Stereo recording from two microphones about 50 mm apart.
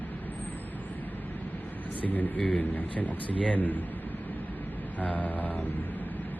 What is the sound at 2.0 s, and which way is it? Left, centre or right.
Speech, left.